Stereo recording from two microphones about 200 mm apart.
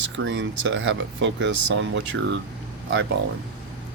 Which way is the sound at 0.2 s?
65° right (ahead or behind).